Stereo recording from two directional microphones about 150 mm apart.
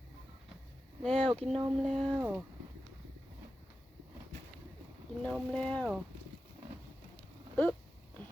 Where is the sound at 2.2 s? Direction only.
10° right (ahead or behind).